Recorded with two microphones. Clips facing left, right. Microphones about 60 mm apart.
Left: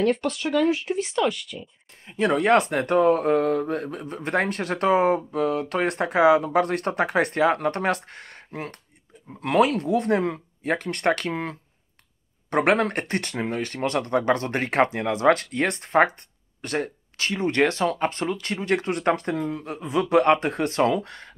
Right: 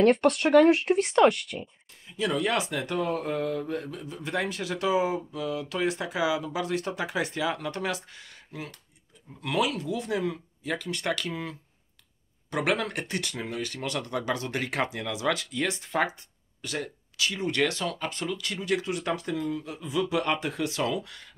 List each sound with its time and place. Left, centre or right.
0.0 s speech: right
2.0 s speech: left